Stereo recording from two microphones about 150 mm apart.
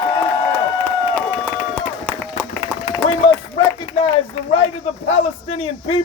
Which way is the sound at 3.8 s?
35° left (ahead or behind).